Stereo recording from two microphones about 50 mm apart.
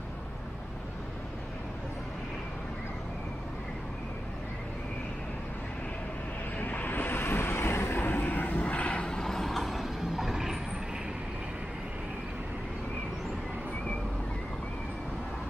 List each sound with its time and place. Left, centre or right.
6.6 s vehicle: left
8.0 s vehicle: left
8.6 s vehicle: left; by 10.6 s centre